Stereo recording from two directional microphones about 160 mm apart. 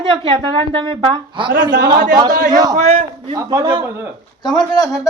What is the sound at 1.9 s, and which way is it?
A man's voice, 55° right (ahead or behind).